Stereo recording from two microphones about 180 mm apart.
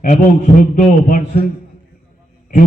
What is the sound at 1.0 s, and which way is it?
Speech, 50° left (ahead or behind).